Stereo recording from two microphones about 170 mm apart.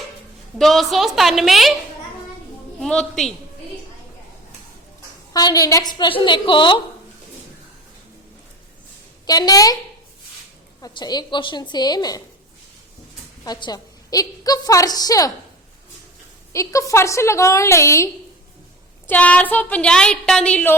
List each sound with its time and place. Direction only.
0.6 s a woman's voice: centre (ahead or behind)
2.8 s a woman's voice: 5° left (ahead or behind)
5.3 s a woman's voice: 25° left (ahead or behind)
9.2 s a woman's voice: 25° left (ahead or behind)
10.8 s a woman's voice: 25° left (ahead or behind)
13.4 s a woman's voice: 25° left (ahead or behind)
16.5 s a woman's voice: 20° left (ahead or behind)